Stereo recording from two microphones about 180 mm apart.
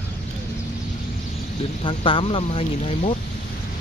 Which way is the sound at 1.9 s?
30° left (ahead or behind).